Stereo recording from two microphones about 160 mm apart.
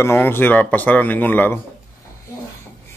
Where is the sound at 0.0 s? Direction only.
15° left (ahead or behind).